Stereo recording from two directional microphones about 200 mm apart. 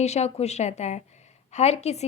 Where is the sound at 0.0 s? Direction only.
35° left (ahead or behind).